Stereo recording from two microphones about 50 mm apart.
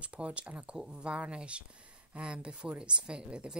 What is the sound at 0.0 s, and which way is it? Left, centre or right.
Speech, right.